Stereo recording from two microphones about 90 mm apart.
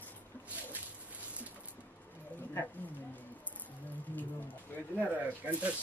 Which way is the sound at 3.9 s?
20° left (ahead or behind).